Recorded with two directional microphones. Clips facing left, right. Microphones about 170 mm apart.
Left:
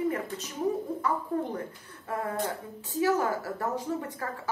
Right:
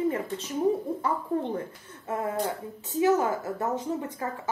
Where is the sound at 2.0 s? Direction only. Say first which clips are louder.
Right 2 dB; 20° right (ahead or behind).